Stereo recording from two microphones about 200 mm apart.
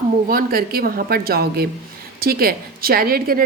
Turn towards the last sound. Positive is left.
turn(degrees=-45)  # may be behind; listen again after turning